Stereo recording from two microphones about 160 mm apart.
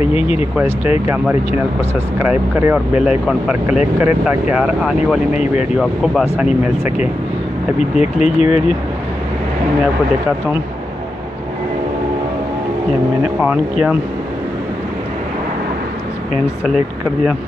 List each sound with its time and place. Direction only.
0.0 s speech: 35° left (ahead or behind)
0.8 s speech: 10° right (ahead or behind)
5.3 s speech: 45° left (ahead or behind)
5.8 s speech: 5° right (ahead or behind)
8.0 s speech: 45° left (ahead or behind)
13.4 s speech: 5° right (ahead or behind)
16.6 s speech: centre (ahead or behind)